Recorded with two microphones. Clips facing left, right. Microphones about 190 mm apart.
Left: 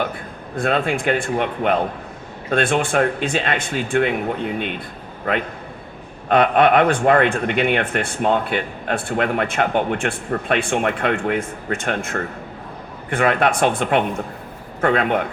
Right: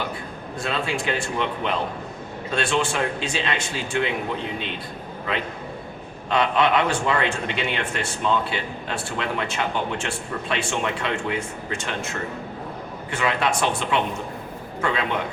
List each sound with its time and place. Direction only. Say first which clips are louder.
0.5 s speech: left 7 dB; 55° left (ahead or behind)
6.2 s speech: left 6 dB; 55° left (ahead or behind)